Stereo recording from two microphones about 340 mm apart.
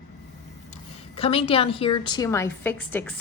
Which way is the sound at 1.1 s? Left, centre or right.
Centre.